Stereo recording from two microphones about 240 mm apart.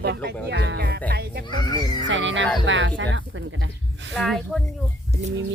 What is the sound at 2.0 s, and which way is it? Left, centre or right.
Speech, right.